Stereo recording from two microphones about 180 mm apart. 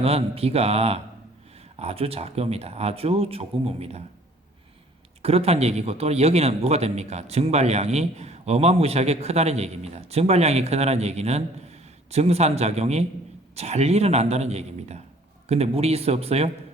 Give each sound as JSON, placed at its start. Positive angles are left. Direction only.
{"t": 0.0, "sound": "a man's voice", "side_deg": -35}
{"t": 5.2, "sound": "a man's voice", "side_deg": -35}